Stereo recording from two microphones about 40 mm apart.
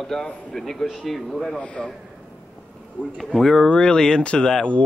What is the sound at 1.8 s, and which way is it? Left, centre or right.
Speech, left.